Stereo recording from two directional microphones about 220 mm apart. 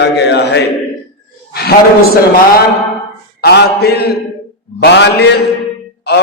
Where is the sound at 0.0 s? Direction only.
50° left (ahead or behind).